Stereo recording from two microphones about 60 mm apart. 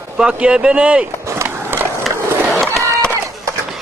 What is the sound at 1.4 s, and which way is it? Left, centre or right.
Skateboard, right.